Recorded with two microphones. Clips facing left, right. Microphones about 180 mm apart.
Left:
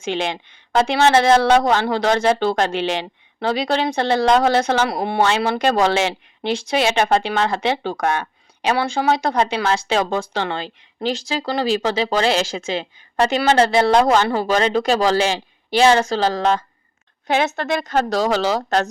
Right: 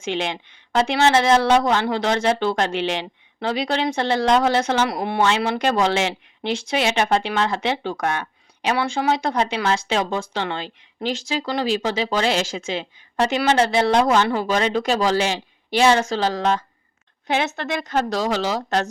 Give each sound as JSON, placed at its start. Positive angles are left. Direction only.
{"t": 0.0, "sound": "speech", "side_deg": 35}
{"t": 17.2, "sound": "a woman's voice", "side_deg": 50}